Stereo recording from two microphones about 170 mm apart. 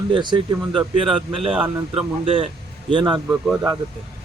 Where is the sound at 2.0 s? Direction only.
30° right (ahead or behind).